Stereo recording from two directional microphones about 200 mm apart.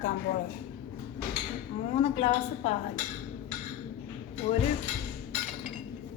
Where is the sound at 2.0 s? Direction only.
35° left (ahead or behind).